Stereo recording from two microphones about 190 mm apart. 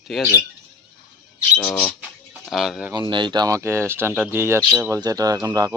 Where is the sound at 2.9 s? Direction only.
25° right (ahead or behind).